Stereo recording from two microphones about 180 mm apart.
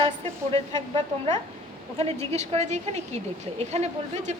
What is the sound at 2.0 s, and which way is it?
A woman's voice, 35° right (ahead or behind).